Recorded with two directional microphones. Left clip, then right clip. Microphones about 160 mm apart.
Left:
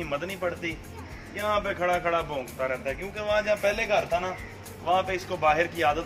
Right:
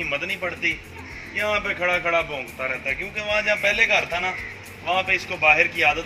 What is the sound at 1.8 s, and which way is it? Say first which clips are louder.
Speech: right 5 dB; 15° right (ahead or behind).